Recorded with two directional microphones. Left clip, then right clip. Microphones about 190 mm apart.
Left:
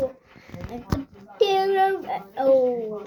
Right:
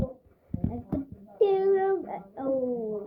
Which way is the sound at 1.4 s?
10° right (ahead or behind).